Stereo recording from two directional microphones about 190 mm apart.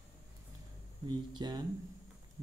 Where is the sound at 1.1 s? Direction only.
20° right (ahead or behind).